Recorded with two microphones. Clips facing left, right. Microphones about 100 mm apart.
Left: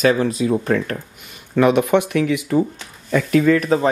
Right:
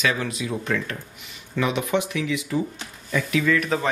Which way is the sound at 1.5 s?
55° left (ahead or behind).